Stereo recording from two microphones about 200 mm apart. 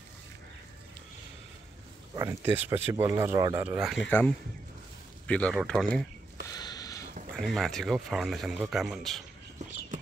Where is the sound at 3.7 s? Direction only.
Centre (ahead or behind).